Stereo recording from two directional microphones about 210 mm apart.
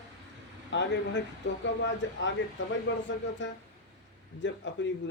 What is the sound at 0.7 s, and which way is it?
Speech, 60° left (ahead or behind).